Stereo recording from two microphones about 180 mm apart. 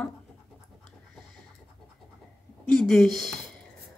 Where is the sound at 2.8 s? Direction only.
Centre (ahead or behind).